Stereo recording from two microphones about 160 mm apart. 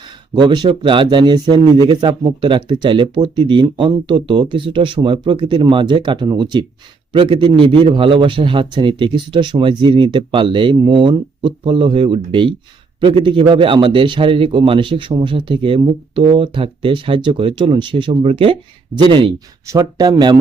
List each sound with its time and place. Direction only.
0.3 s a man's voice: 30° right (ahead or behind)